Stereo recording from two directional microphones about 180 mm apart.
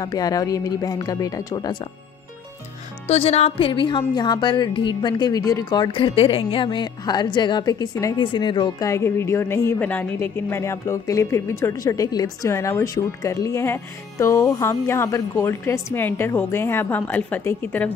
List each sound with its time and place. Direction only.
0.0 s speech: 20° left (ahead or behind)
3.1 s a woman's voice: 35° left (ahead or behind); by 17.9 s 10° left (ahead or behind)